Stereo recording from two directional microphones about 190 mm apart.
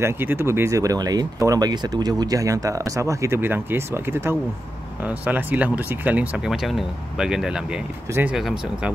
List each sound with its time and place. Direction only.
0.0 s speech: 10° right (ahead or behind)